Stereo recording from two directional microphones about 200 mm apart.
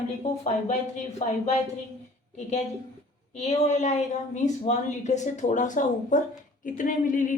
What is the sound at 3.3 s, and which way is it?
Speech, 35° left (ahead or behind).